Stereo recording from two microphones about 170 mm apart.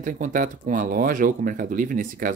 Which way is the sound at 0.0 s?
50° right (ahead or behind).